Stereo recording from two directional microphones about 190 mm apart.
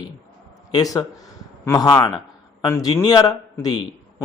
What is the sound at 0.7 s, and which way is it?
A man's voice, 20° left (ahead or behind).